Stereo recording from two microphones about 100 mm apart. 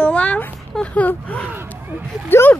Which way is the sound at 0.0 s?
15° left (ahead or behind).